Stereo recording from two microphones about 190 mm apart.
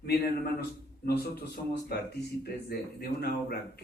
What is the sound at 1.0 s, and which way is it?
Speech, 60° left (ahead or behind).